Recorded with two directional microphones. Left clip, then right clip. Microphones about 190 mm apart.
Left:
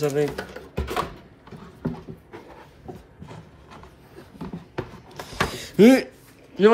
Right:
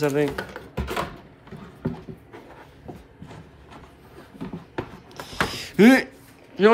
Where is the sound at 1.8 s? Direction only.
15° left (ahead or behind).